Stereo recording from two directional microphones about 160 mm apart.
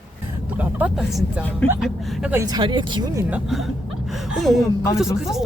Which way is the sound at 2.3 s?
20° right (ahead or behind).